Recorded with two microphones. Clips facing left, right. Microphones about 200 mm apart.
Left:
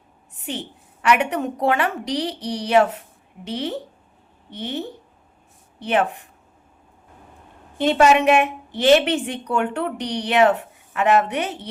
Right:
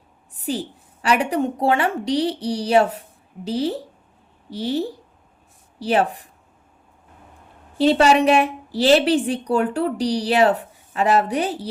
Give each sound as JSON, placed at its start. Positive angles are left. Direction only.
{"t": 0.4, "sound": "a woman's voice", "side_deg": -35}
{"t": 7.8, "sound": "a woman's voice", "side_deg": -35}